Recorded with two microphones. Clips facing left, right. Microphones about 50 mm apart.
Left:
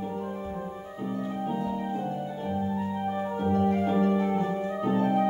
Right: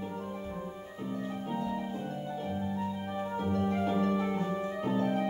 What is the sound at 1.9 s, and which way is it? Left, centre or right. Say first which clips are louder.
Music: left 5 dB; centre.